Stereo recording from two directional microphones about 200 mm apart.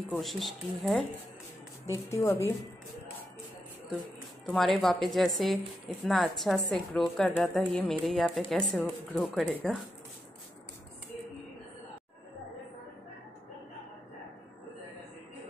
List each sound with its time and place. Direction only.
0.1 s a woman's voice: centre (ahead or behind)
2.2 s a woman's voice: 15° left (ahead or behind)
4.5 s a woman's voice: centre (ahead or behind)